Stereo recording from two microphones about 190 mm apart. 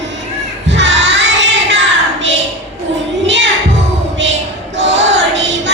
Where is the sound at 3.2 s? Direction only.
70° right (ahead or behind).